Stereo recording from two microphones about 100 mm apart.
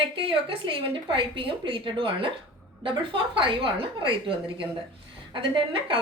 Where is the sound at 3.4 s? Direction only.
55° right (ahead or behind).